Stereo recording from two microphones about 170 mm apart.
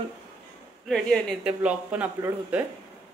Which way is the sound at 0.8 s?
Centre (ahead or behind).